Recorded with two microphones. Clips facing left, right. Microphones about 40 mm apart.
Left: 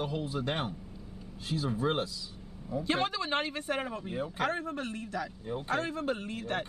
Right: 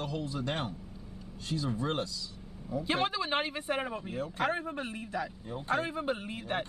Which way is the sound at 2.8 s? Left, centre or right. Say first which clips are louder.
Even; centre.